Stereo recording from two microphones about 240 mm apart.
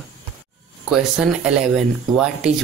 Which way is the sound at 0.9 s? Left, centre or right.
Centre.